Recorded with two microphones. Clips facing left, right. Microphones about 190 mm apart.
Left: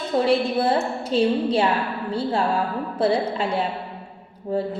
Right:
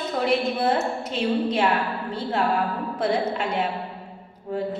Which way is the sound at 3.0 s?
30° left (ahead or behind).